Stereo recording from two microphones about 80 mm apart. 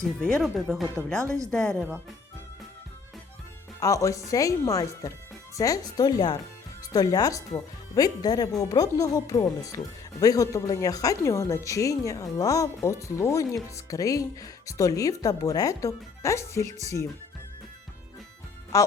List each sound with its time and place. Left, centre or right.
0.0 s speech: centre
0.4 s speech: centre
1.5 s speech: centre
3.8 s a woman's voice: left
18.7 s speech: left